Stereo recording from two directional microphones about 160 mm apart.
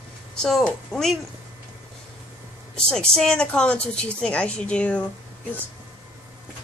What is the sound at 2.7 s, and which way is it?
A woman's voice, 5° left (ahead or behind).